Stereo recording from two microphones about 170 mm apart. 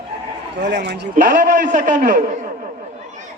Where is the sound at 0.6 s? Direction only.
90° right.